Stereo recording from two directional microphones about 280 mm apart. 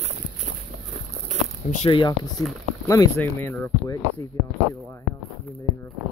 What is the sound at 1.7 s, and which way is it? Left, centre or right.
Speech, left.